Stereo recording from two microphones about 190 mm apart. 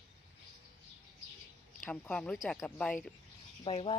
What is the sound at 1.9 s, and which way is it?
A woman's voice, 5° left (ahead or behind).